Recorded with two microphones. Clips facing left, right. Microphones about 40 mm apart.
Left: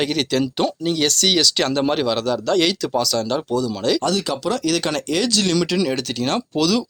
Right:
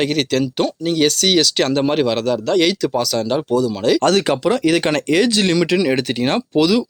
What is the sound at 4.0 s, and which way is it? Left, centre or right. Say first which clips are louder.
Speech: right 6 dB; right.